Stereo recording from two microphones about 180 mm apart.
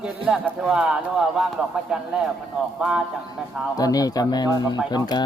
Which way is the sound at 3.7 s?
20° left (ahead or behind).